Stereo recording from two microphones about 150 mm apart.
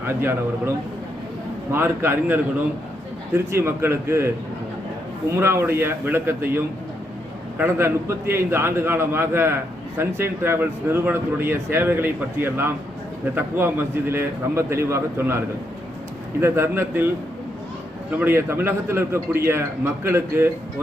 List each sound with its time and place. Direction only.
0.1 s speech: 15° right (ahead or behind)
1.7 s speech: 15° right (ahead or behind)
5.3 s speech: 15° right (ahead or behind)
7.6 s speech: 15° right (ahead or behind)
18.2 s speech: 15° right (ahead or behind)